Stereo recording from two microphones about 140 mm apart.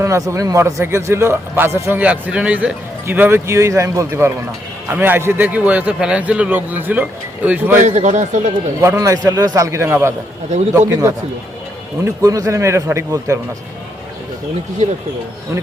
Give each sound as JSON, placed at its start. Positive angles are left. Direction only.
{"t": 0.0, "sound": "a man's voice", "side_deg": -20}
{"t": 7.8, "sound": "speech", "side_deg": -60}
{"t": 8.8, "sound": "a man's voice", "side_deg": -20}